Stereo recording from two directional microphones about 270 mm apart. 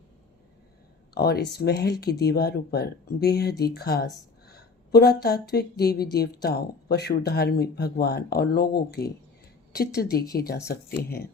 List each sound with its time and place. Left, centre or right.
1.1 s a woman's voice: left